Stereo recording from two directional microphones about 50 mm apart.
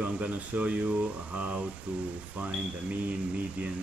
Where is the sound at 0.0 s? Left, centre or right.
Right.